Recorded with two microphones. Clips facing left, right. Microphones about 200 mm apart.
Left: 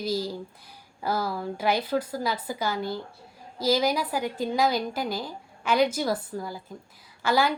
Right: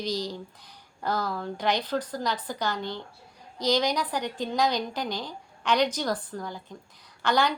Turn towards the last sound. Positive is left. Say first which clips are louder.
# left 1 dB
turn(degrees=5)  # may be behind; listen again after turning